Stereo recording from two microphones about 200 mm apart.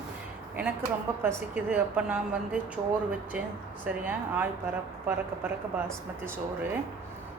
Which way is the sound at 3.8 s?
10° right (ahead or behind).